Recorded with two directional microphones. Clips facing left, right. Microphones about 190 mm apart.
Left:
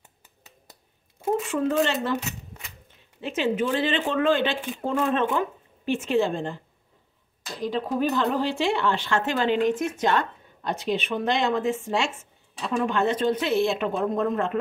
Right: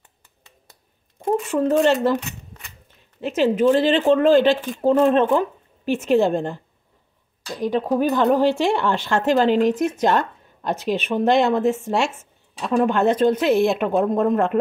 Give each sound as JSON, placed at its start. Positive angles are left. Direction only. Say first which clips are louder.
{"t": 1.7, "sound": "speech", "louder": "right 8 dB", "side_deg": -45}
{"t": 3.2, "sound": "speech", "louder": "right 6 dB", "side_deg": -40}
{"t": 7.6, "sound": "speech", "louder": "right 5 dB", "side_deg": -45}